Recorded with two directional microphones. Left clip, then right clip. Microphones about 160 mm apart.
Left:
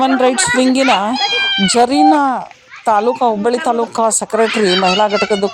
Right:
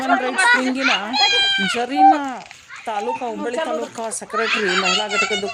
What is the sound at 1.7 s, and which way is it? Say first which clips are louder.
Speech: left 5 dB; 40° left (ahead or behind).